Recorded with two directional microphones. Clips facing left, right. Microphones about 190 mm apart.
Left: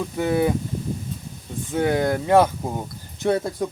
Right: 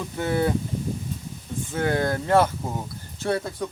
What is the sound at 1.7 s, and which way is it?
Speech, 15° left (ahead or behind).